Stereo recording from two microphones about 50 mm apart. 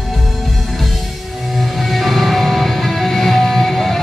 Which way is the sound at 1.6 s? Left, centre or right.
Centre.